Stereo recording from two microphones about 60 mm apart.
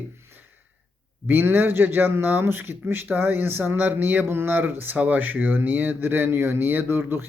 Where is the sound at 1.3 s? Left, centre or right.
Right.